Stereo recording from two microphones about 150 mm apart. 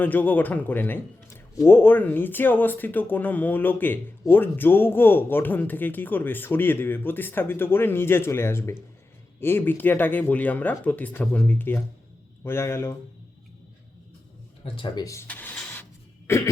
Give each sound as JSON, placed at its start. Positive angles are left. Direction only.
{"t": 0.0, "sound": "a man's voice", "side_deg": 10}
{"t": 14.6, "sound": "speech", "side_deg": 30}
{"t": 15.3, "sound": "a sound", "side_deg": 10}